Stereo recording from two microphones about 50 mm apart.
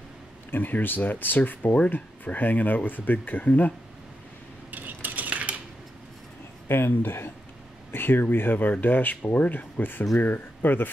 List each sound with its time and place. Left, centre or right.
0.5 s speech: left
4.6 s cutlery: right
6.7 s speech: left